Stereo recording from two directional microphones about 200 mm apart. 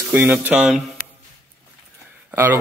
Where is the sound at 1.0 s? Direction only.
40° left (ahead or behind).